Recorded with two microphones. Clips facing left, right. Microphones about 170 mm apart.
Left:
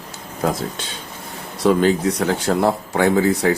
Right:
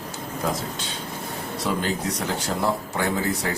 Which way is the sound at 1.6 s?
60° left (ahead or behind).